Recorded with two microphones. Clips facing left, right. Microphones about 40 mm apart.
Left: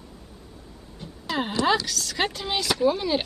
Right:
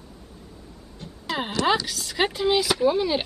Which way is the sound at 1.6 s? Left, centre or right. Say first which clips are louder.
Right 1 dB; centre.